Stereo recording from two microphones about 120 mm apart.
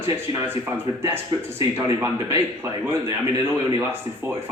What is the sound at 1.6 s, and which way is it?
A man's voice, 25° right (ahead or behind).